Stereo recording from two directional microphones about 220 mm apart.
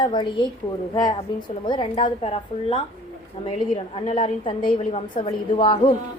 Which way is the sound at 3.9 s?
35° left (ahead or behind).